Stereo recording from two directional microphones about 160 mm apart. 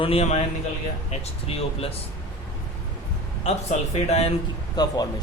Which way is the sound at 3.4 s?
45° left (ahead or behind).